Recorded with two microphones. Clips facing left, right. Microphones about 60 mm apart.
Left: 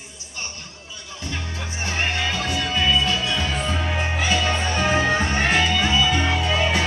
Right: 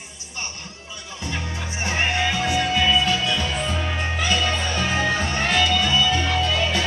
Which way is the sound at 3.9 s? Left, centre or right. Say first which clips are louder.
Left 1 dB; centre.